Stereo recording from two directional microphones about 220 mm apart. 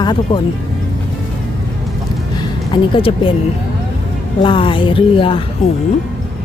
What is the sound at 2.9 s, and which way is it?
Speech, 25° left (ahead or behind).